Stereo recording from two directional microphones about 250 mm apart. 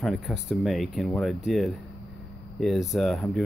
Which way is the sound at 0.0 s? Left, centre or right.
Centre.